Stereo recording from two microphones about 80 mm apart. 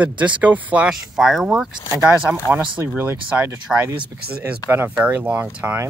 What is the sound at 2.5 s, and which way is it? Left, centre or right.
Speech, right.